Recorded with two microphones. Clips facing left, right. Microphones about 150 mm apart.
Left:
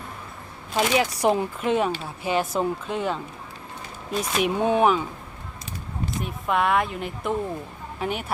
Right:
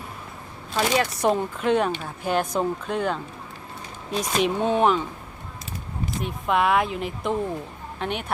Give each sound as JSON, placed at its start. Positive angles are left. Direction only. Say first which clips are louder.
{"t": 0.8, "sound": "speech", "louder": "left 1 dB", "side_deg": 10}
{"t": 1.6, "sound": "speech", "louder": "right 2 dB", "side_deg": 0}
{"t": 6.1, "sound": "speech", "louder": "right 1 dB", "side_deg": 0}